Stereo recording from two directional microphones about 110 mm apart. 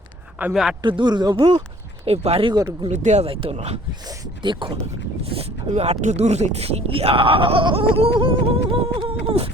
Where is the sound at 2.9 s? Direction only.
90° right; by 3.8 s 70° right (ahead or behind).